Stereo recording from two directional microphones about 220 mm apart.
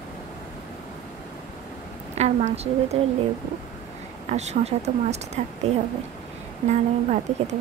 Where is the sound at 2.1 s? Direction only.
30° right (ahead or behind).